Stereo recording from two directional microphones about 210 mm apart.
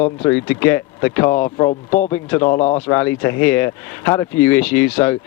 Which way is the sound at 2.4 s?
30° left (ahead or behind).